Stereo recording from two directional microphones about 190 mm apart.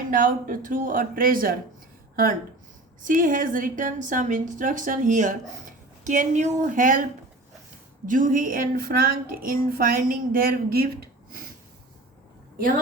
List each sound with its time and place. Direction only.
0.1 s speech: 45° right (ahead or behind)
3.0 s speech: 45° right (ahead or behind)
8.0 s speech: 45° right (ahead or behind)
12.5 s speech: 45° right (ahead or behind)